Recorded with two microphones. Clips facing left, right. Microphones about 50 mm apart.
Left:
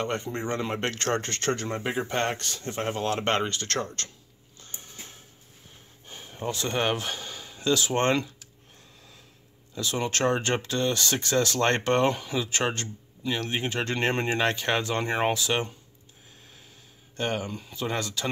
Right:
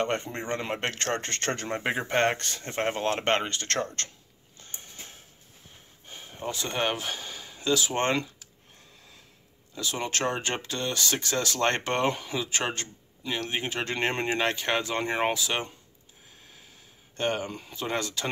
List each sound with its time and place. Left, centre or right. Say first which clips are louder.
0.0 s speech: even; right
4.6 s a sound: even; right
6.0 s a sound: left 2 dB; centre
6.5 s speech: left 2 dB; centre
9.8 s speech: left 3 dB; centre
17.2 s speech: right 1 dB; right